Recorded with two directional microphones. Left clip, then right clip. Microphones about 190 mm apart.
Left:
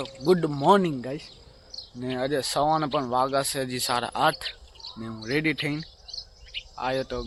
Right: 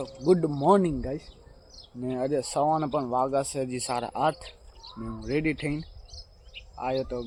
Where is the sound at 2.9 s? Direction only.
10° left (ahead or behind).